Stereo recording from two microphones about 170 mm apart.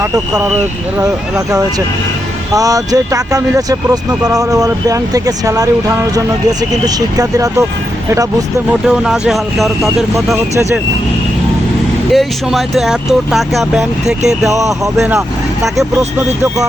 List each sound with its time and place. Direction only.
0.0 s speech: 15° right (ahead or behind)
2.5 s speech: 20° right (ahead or behind)
8.9 s speech: 5° right (ahead or behind)
10.3 s speech: 15° right (ahead or behind)
12.1 s speech: centre (ahead or behind)